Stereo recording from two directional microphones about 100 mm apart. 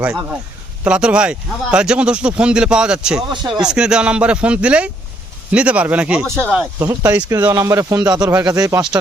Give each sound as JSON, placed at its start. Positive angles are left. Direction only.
{"t": 0.0, "sound": "speech", "side_deg": -10}
{"t": 6.2, "sound": "speech", "side_deg": -25}